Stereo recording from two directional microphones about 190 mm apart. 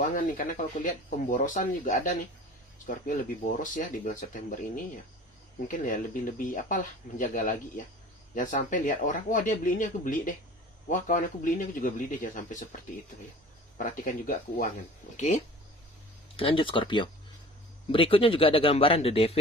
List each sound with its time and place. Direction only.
0.0 s speech: 45° left (ahead or behind)
16.4 s speech: 25° left (ahead or behind)